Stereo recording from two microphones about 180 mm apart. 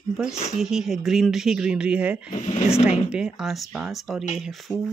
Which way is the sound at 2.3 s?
35° left (ahead or behind).